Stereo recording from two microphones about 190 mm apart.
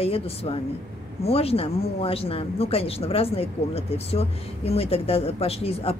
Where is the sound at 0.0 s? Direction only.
30° left (ahead or behind).